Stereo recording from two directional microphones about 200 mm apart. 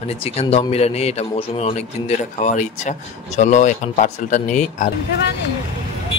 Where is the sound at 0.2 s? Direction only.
30° left (ahead or behind).